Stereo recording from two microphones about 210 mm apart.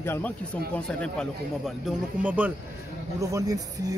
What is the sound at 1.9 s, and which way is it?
Speech, 5° right (ahead or behind).